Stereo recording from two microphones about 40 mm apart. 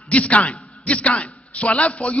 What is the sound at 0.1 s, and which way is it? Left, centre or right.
A man's voice, left.